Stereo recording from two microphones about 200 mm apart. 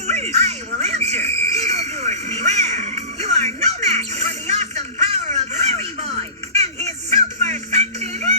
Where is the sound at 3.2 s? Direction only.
35° right (ahead or behind).